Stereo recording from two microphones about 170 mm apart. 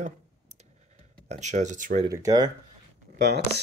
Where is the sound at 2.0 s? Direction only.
20° right (ahead or behind).